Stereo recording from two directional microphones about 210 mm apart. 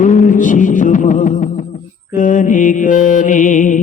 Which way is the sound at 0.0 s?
35° left (ahead or behind).